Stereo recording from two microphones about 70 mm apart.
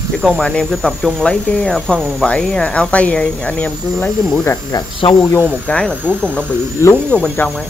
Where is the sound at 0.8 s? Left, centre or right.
Centre.